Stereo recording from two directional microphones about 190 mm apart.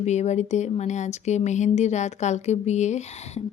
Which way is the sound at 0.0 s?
35° left (ahead or behind).